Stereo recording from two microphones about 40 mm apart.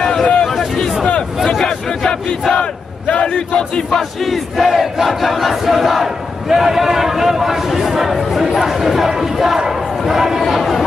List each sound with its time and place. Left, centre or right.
0.0 s a sound: centre
1.5 s battle cry: centre
3.2 s a sound: left
3.9 s battle cry: centre
4.6 s speech: centre
5.0 s battle cry: centre
8.5 s speech: centre